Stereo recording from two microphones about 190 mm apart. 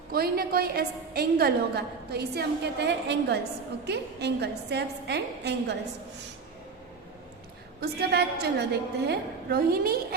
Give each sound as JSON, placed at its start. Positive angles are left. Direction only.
{"t": 0.1, "sound": "a woman's voice", "side_deg": -50}
{"t": 7.8, "sound": "a woman's voice", "side_deg": -60}